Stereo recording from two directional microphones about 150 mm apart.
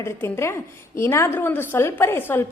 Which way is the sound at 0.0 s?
15° left (ahead or behind).